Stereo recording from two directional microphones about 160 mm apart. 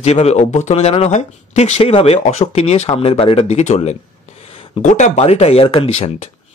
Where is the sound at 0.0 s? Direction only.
40° left (ahead or behind).